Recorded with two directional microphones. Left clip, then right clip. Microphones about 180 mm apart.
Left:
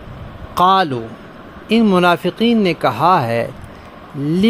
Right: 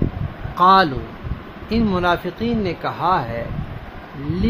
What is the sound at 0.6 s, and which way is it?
Speech, 45° left (ahead or behind).